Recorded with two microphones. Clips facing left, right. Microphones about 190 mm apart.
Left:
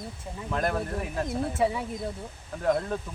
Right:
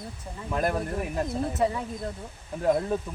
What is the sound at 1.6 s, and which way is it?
Speech, 5° left (ahead or behind).